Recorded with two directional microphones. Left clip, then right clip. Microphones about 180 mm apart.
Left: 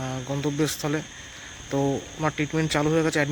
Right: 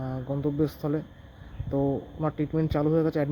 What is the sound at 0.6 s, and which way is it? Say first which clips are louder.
Speech: left 3 dB; 5° left (ahead or behind).